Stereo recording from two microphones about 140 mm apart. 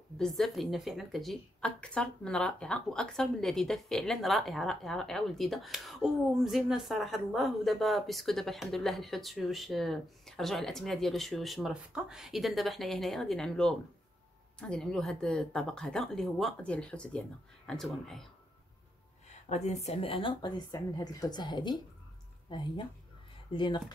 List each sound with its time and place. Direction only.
0.2 s a woman's voice: centre (ahead or behind)
19.2 s a woman's voice: 55° left (ahead or behind); by 23.8 s 35° left (ahead or behind)